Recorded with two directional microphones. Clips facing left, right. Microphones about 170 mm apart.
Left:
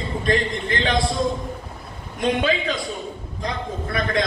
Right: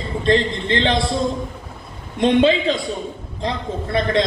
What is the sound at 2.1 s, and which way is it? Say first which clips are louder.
A man's voice: right 6 dB; 25° right (ahead or behind).